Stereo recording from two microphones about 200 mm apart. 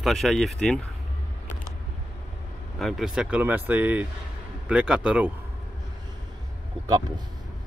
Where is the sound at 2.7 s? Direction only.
Centre (ahead or behind).